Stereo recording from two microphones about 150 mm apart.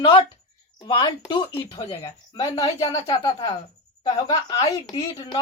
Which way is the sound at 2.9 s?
35° left (ahead or behind).